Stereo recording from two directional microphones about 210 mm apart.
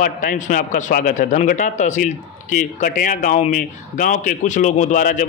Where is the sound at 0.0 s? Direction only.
40° left (ahead or behind).